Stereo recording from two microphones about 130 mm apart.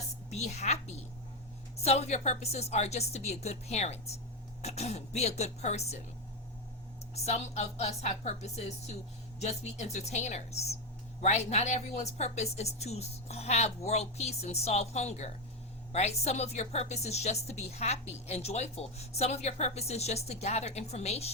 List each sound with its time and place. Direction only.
0.3 s a woman's voice: 60° left (ahead or behind)
7.3 s a woman's voice: 55° left (ahead or behind)